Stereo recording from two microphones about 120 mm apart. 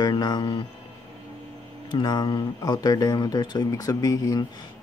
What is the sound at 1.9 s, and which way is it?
Speech, 40° left (ahead or behind).